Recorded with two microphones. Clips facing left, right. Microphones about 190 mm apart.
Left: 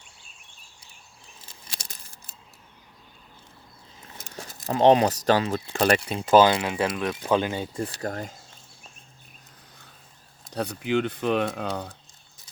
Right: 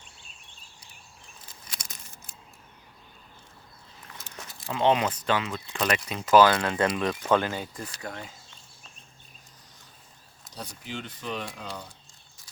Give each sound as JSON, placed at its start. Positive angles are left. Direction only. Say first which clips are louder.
{"t": 1.5, "sound": "a sound", "louder": "left 2 dB", "side_deg": 30}
{"t": 4.4, "sound": "a sound", "louder": "left 6 dB", "side_deg": 40}
{"t": 5.2, "sound": "speech", "louder": "left 6 dB", "side_deg": 35}
{"t": 6.5, "sound": "speech", "louder": "even", "side_deg": 10}
{"t": 7.2, "sound": "speech", "louder": "left 3 dB", "side_deg": 15}
{"t": 7.8, "sound": "speech", "louder": "left 8 dB", "side_deg": 35}
{"t": 10.5, "sound": "speech", "louder": "left 13 dB", "side_deg": 65}